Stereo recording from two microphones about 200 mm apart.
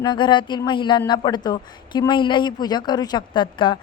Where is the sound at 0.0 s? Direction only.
25° left (ahead or behind).